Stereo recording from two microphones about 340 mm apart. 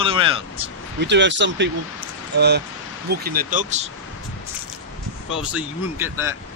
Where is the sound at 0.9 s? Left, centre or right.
Right.